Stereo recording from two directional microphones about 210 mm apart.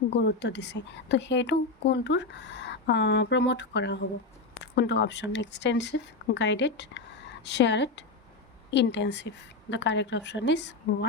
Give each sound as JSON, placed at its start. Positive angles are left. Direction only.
{"t": 0.1, "sound": "a woman's voice", "side_deg": 55}